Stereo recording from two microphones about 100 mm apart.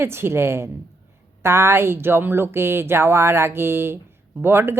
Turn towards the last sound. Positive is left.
turn(degrees=-20)  # may be behind; listen again after turning